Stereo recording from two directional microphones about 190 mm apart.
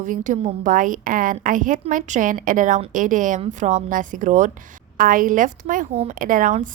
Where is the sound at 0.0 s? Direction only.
40° right (ahead or behind).